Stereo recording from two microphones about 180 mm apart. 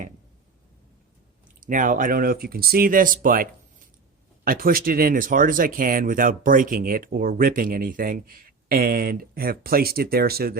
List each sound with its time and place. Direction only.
1.6 s speech: 45° right (ahead or behind)